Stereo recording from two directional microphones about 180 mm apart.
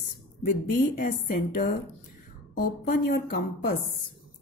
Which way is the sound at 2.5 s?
55° left (ahead or behind).